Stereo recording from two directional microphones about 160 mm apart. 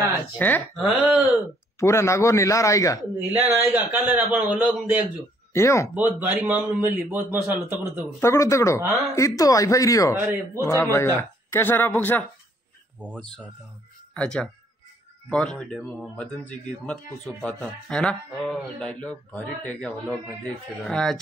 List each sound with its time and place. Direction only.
0.4 s speech: 10° left (ahead or behind)
0.8 s a man's voice: 10° right (ahead or behind)
1.8 s a man's voice: 15° left (ahead or behind)
3.3 s a man's voice: 15° right (ahead or behind)
5.1 s speech: 15° left (ahead or behind)
5.9 s a man's voice: 10° right (ahead or behind)
8.2 s a man's voice: 15° left (ahead or behind)
10.1 s a man's voice: 15° right (ahead or behind)
10.6 s speech: 15° left (ahead or behind)
13.0 s a man's voice: 10° right (ahead or behind)
14.1 s speech: 5° left (ahead or behind)